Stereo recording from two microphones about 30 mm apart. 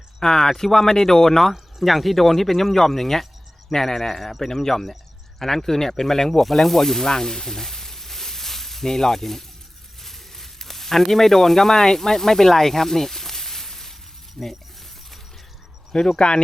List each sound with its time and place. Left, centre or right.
0.2 s speech: centre
10.0 s sizzle: centre
14.4 s speech: centre
15.9 s speech: centre